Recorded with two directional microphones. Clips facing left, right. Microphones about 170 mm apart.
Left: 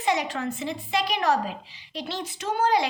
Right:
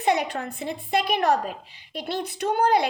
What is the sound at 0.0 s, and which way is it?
A woman's voice, 55° right (ahead or behind).